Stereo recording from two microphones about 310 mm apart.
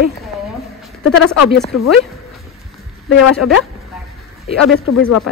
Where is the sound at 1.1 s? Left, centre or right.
Left.